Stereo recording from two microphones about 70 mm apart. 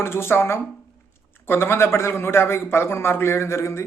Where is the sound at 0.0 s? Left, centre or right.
Left.